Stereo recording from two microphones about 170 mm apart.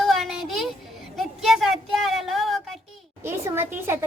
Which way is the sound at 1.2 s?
Centre (ahead or behind).